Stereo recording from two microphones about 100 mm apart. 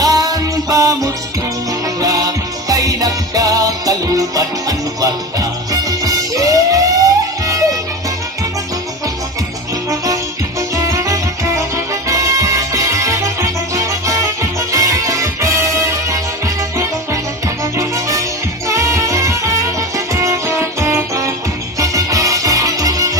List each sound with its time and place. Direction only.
0.0 s music: 40° right (ahead or behind)
10.8 s music: 35° right (ahead or behind)